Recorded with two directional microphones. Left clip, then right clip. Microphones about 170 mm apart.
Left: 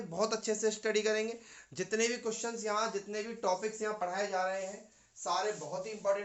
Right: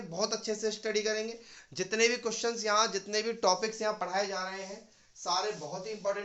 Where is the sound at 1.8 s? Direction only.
10° right (ahead or behind).